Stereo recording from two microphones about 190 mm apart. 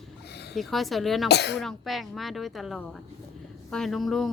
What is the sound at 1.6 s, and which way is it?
Speech, centre (ahead or behind).